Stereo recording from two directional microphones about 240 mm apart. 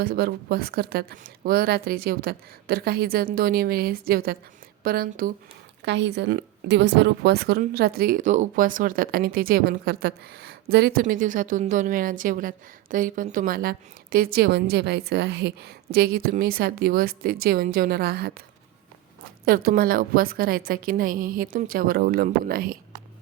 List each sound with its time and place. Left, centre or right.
0.0 s a woman's voice: right
19.5 s a woman's voice: right